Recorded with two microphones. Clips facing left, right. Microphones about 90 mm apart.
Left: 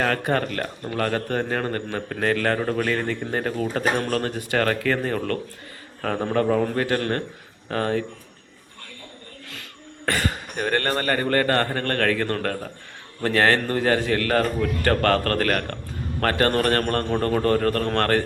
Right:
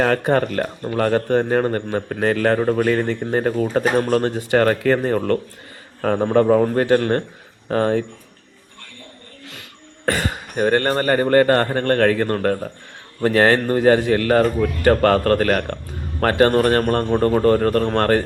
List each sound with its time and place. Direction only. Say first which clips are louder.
0.0 s a man's voice: right 5 dB; 25° right (ahead or behind)
10.1 s a man's voice: right 3 dB; 20° right (ahead or behind)